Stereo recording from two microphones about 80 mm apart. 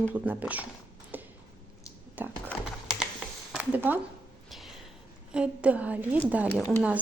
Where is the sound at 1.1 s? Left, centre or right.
Right.